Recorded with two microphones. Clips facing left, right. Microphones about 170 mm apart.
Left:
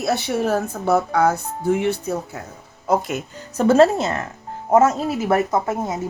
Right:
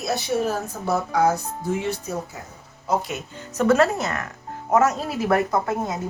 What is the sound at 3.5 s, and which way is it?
Speech, 30° left (ahead or behind).